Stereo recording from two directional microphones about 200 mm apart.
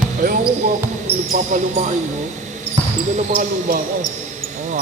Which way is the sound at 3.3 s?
45° right (ahead or behind).